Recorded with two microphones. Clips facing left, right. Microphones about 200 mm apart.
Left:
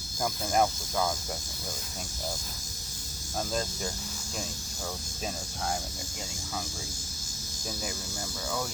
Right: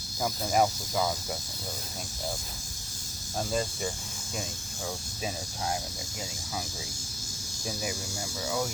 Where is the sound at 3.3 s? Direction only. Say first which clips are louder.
Right 2 dB; centre (ahead or behind).